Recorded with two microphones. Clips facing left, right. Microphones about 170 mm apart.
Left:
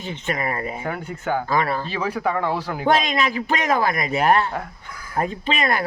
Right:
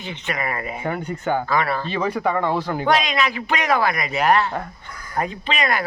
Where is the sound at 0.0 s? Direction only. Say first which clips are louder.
Left 1 dB; 40° left (ahead or behind).